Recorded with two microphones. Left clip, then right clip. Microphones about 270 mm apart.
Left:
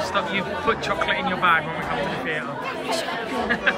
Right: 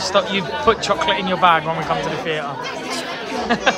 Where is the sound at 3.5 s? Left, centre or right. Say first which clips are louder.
Right 6 dB; centre.